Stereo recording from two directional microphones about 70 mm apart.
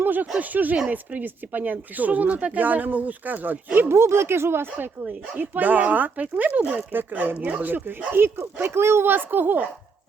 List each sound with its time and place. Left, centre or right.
0.0 s a sound: right
0.3 s speech: right
3.8 s speech: right